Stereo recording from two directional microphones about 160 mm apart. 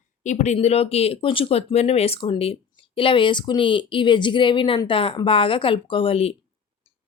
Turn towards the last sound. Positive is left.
turn(degrees=35)  # may be behind; listen again after turning